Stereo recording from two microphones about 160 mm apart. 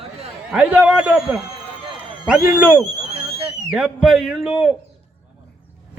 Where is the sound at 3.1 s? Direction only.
35° right (ahead or behind).